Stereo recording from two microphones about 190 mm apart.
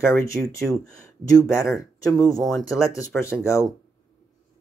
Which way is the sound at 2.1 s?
Centre (ahead or behind).